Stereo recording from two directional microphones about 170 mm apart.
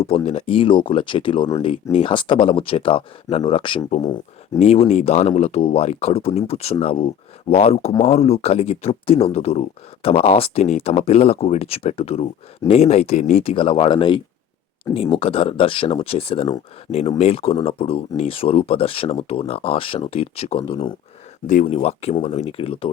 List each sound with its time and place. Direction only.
0.0 s speech: 35° left (ahead or behind)
21.4 s speech: 45° left (ahead or behind)